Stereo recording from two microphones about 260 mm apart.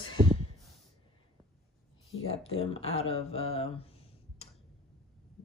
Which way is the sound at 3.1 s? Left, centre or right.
Left.